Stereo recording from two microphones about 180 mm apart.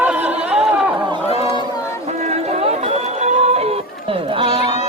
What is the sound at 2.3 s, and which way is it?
Chatter, 35° right (ahead or behind).